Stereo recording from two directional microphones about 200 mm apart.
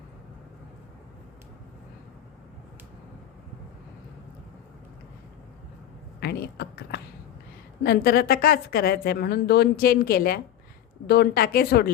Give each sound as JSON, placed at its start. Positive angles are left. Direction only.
{"t": 6.1, "sound": "a woman's voice", "side_deg": 55}